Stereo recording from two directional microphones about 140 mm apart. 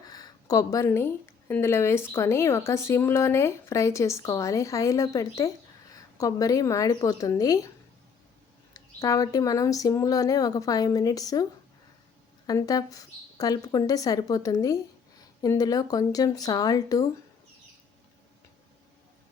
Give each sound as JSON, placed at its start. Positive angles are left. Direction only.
{"t": 0.1, "sound": "a woman's voice", "side_deg": 25}
{"t": 8.7, "sound": "a woman's voice", "side_deg": 25}
{"t": 12.5, "sound": "a woman's voice", "side_deg": 25}